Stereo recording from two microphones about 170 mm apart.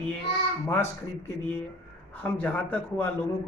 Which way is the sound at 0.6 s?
15° left (ahead or behind).